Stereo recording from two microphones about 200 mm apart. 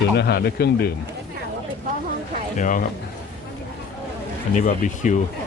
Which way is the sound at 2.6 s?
40° left (ahead or behind).